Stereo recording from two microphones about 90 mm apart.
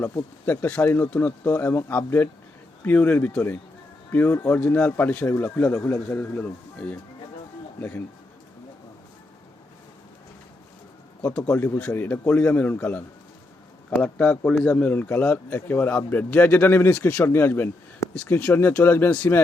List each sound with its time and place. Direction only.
0.0 s a man's voice: 25° left (ahead or behind)
11.3 s a man's voice: 25° left (ahead or behind)